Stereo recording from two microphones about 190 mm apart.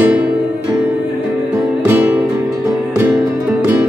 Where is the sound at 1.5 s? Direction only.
10° right (ahead or behind).